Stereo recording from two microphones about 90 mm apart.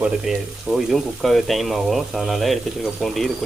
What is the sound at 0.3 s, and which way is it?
Speech, 5° right (ahead or behind).